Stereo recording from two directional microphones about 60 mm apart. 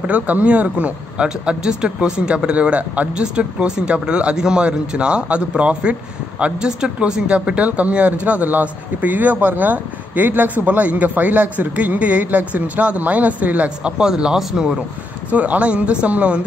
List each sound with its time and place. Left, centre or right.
0.0 s speech: right
15.3 s speech: right